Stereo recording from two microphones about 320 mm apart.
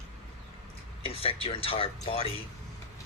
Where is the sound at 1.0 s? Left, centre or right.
Centre.